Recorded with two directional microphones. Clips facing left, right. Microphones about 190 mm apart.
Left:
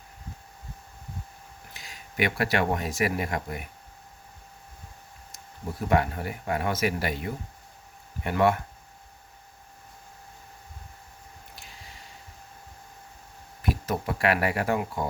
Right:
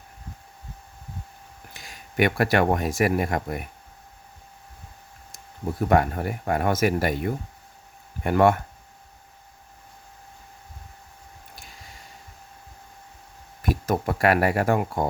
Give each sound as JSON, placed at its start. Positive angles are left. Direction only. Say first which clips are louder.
{"t": 1.7, "sound": "speech", "louder": "right 6 dB", "side_deg": -50}
{"t": 5.9, "sound": "speech", "louder": "right 3 dB", "side_deg": -50}
{"t": 13.7, "sound": "speech", "louder": "right 4 dB", "side_deg": -45}